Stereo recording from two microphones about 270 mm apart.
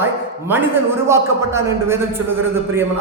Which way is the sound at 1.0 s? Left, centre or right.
Centre.